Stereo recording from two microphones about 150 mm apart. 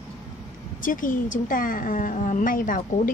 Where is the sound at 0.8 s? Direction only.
65° left (ahead or behind).